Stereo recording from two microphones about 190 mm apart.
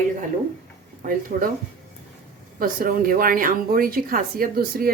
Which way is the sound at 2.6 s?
50° right (ahead or behind).